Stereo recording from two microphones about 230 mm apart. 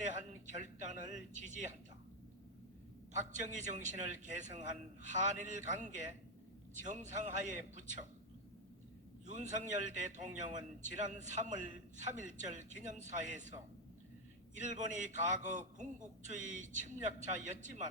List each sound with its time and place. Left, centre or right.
0.0 s a man's voice: right
3.3 s a man's voice: right
9.2 s a man's voice: right
14.6 s a man's voice: right